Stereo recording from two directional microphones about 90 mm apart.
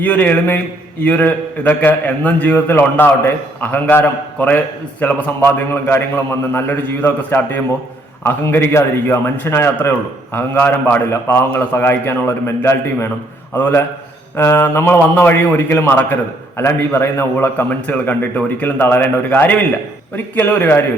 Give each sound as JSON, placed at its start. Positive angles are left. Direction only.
{"t": 0.0, "sound": "a man's voice", "side_deg": 20}